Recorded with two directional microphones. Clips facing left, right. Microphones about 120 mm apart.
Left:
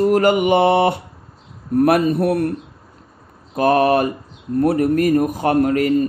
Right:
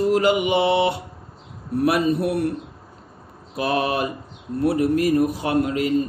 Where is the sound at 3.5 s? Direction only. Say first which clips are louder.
Left 8 dB; 50° left (ahead or behind).